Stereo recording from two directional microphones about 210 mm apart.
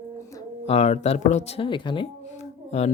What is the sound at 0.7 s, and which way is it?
Speech, 30° left (ahead or behind).